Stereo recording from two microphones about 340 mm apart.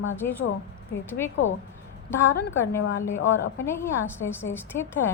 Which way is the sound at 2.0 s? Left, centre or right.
Centre.